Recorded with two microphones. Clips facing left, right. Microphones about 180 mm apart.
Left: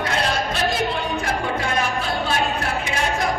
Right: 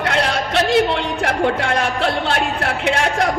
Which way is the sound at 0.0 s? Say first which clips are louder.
Right 3 dB; 70° right (ahead or behind).